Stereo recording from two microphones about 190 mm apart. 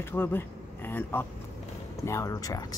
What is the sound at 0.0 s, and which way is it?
Speech, 10° left (ahead or behind).